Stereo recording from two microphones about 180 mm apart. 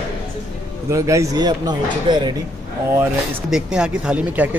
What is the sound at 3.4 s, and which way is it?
Speech, 5° right (ahead or behind).